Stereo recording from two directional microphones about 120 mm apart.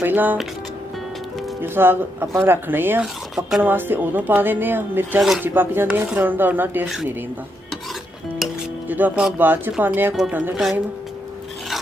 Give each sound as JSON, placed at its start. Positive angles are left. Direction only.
{"t": 0.0, "sound": "speech", "side_deg": -15}
{"t": 1.6, "sound": "speech", "side_deg": -20}
{"t": 3.0, "sound": "speech", "side_deg": -5}
{"t": 3.6, "sound": "speech", "side_deg": -15}
{"t": 8.8, "sound": "speech", "side_deg": -15}